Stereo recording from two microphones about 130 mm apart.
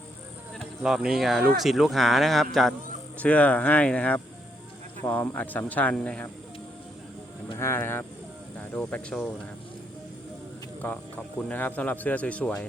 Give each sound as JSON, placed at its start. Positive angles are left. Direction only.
{"t": 0.8, "sound": "speech", "side_deg": -5}
{"t": 3.2, "sound": "speech", "side_deg": 10}
{"t": 7.6, "sound": "speech", "side_deg": 20}
{"t": 10.8, "sound": "speech", "side_deg": 10}